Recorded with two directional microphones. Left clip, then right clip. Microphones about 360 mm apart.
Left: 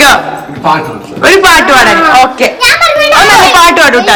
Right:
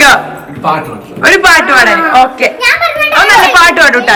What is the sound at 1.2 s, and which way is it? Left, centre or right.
A man's voice, centre.